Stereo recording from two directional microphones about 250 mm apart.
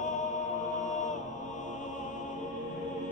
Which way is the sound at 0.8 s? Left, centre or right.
Left.